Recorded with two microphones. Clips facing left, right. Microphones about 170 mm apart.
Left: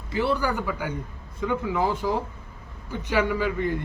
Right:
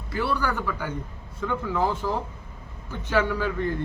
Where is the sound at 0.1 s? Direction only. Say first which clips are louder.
Left 2 dB; 20° left (ahead or behind).